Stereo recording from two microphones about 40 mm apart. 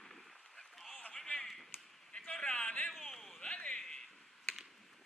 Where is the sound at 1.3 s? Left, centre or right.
Left.